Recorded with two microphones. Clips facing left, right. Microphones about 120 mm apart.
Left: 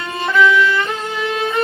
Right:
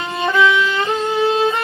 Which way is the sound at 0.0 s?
20° right (ahead or behind).